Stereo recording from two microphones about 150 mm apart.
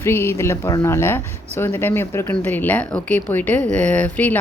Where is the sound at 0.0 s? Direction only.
15° left (ahead or behind).